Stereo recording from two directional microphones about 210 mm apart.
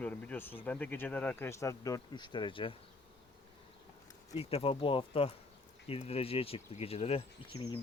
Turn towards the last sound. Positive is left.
turn(degrees=25)  # may be behind; listen again after turning